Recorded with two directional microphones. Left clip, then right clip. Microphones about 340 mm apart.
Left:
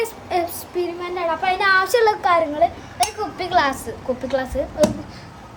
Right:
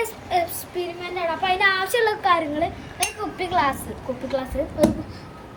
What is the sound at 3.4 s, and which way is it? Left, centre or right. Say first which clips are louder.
Child singing: left 3 dB; centre.